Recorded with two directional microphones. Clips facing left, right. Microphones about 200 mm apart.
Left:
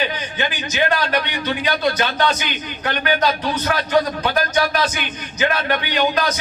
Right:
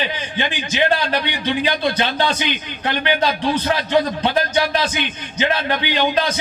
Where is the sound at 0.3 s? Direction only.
30° right (ahead or behind).